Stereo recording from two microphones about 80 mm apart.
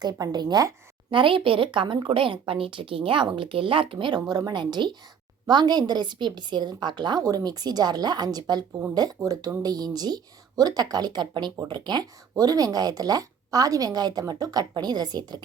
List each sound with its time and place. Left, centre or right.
0.0 s a woman's voice: right
1.1 s a woman's voice: right
5.5 s a woman's voice: right
7.3 s a woman's voice: right